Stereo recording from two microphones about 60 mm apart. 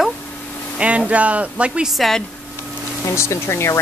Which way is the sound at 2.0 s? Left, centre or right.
Centre.